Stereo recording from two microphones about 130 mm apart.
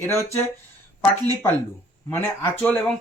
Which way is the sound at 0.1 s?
20° left (ahead or behind).